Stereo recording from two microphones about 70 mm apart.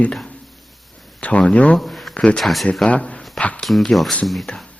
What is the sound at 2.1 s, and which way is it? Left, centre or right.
Speech, centre.